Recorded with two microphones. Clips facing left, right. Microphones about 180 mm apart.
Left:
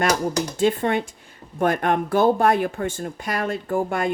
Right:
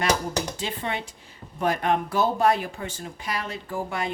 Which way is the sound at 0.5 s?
50° left (ahead or behind).